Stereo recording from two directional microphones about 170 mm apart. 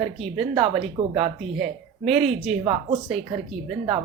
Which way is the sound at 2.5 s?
35° right (ahead or behind).